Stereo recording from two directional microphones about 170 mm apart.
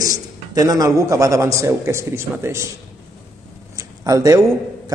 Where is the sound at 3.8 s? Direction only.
20° right (ahead or behind).